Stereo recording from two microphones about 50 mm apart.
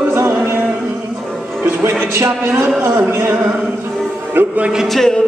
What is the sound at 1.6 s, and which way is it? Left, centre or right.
Speech, right.